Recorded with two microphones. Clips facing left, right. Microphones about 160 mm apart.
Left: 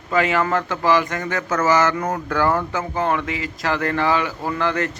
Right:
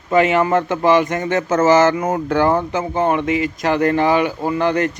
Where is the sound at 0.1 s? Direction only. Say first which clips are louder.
Right 5 dB; 20° right (ahead or behind).